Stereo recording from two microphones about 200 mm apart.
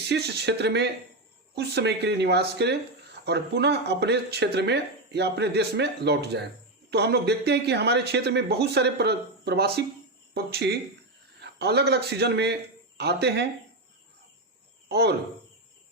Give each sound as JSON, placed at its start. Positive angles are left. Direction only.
{"t": 0.1, "sound": "a man's voice", "side_deg": -55}
{"t": 14.8, "sound": "speech", "side_deg": -55}